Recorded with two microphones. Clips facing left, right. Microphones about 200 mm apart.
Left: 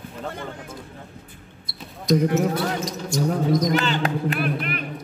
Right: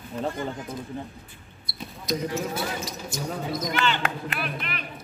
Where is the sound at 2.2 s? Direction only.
60° left (ahead or behind).